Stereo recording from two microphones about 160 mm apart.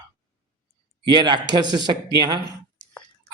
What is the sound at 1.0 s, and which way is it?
A man's voice, 25° right (ahead or behind).